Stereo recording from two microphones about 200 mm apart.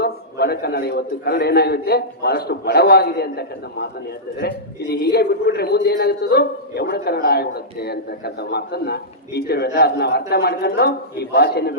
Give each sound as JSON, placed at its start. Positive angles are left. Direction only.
{"t": 0.0, "sound": "a man's voice", "side_deg": 55}